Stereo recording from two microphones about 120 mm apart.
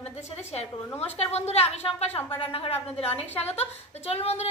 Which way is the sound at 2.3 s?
50° left (ahead or behind).